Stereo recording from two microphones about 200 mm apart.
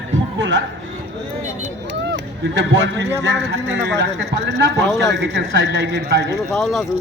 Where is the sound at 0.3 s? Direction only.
70° right (ahead or behind).